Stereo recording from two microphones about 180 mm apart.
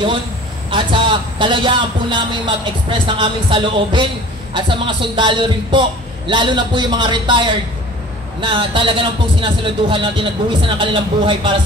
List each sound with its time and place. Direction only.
0.7 s a man's voice: 30° right (ahead or behind)